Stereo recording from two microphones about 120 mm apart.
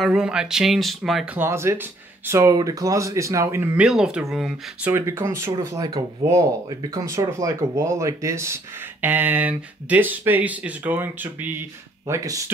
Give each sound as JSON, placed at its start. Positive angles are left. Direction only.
{"t": 0.0, "sound": "speech", "side_deg": -5}
{"t": 1.3, "sound": "speech", "side_deg": -20}
{"t": 3.7, "sound": "speech", "side_deg": -5}
{"t": 4.9, "sound": "speech", "side_deg": -20}
{"t": 12.1, "sound": "speech", "side_deg": -30}